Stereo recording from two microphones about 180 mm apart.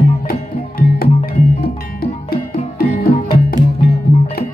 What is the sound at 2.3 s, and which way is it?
Music, 55° left (ahead or behind).